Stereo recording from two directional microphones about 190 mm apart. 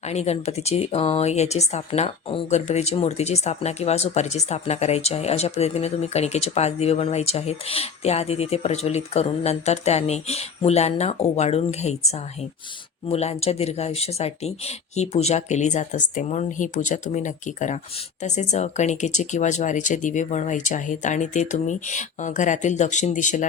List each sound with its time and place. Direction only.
0.1 s speech: 35° left (ahead or behind)